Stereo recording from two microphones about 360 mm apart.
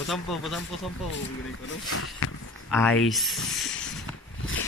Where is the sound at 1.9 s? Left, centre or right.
Left.